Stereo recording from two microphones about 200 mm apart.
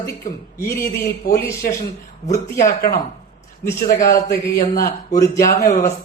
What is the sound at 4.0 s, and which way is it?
Speech, 15° left (ahead or behind).